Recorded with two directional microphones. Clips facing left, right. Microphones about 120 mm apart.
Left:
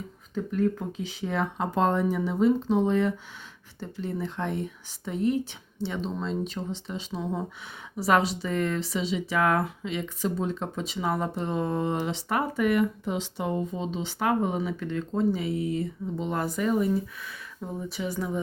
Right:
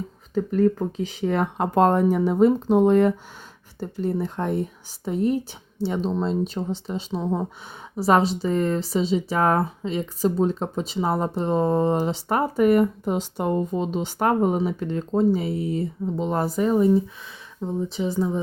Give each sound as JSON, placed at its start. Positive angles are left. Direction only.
{"t": 0.6, "sound": "speech", "side_deg": -60}